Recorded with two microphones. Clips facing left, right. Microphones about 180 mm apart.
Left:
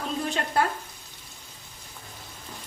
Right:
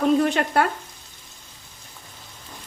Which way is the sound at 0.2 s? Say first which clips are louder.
Right 7 dB; 65° right (ahead or behind).